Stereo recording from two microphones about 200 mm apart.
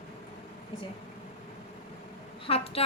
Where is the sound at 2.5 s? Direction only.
30° left (ahead or behind).